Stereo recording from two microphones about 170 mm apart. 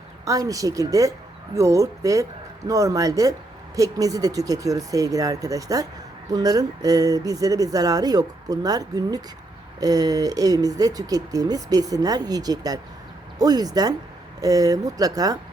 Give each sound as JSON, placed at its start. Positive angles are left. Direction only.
{"t": 0.3, "sound": "speech", "side_deg": -20}